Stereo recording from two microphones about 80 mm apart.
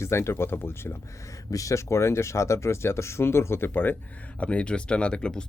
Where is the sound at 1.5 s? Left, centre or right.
Left.